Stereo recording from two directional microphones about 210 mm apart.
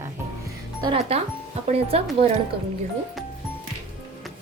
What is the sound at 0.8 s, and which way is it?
Speech, 25° right (ahead or behind).